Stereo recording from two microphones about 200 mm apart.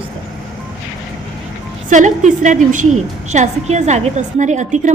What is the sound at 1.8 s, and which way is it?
A woman's voice, 40° right (ahead or behind).